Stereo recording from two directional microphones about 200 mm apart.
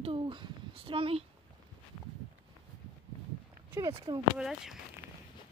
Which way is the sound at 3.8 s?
15° right (ahead or behind).